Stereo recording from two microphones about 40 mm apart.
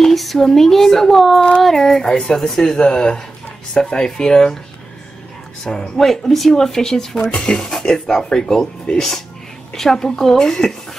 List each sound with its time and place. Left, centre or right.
0.0 s speech: centre
5.6 s speech: centre
9.8 s speech: centre